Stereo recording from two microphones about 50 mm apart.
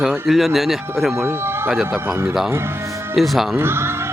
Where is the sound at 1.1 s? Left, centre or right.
Right.